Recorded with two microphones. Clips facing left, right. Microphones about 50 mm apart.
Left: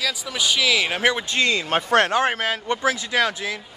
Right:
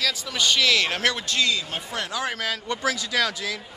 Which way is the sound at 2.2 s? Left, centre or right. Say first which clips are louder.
Left 6 dB; left.